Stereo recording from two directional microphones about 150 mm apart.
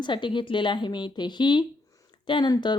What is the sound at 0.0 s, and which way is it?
A woman's voice, 30° left (ahead or behind).